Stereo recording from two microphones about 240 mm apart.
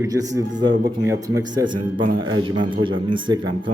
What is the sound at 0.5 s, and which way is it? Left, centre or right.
Speech, right.